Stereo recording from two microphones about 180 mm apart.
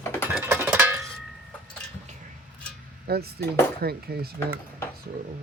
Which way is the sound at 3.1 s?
60° right (ahead or behind).